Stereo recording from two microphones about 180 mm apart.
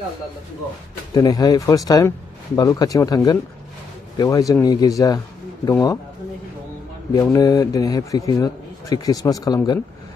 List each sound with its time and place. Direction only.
1.1 s a man's voice: 20° left (ahead or behind)
7.2 s a man's voice: 20° left (ahead or behind)